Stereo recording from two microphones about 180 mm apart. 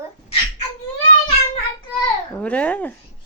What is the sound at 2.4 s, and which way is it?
Speech, 5° left (ahead or behind).